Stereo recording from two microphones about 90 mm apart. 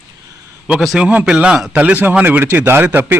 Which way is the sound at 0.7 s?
5° right (ahead or behind).